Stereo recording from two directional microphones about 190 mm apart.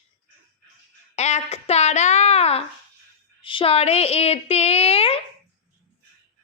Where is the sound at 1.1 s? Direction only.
35° left (ahead or behind).